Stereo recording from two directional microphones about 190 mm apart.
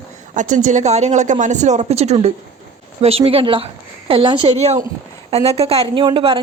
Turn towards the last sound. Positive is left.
turn(degrees=-25)  # may be behind; listen again after turning